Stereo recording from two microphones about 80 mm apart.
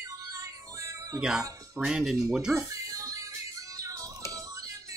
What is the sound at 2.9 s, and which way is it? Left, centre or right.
Music, right.